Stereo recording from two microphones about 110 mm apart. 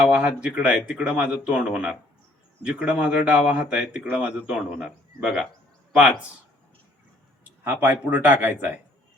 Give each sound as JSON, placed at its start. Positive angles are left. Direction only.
{"t": 0.0, "sound": "speech", "side_deg": -10}
{"t": 7.6, "sound": "speech", "side_deg": -15}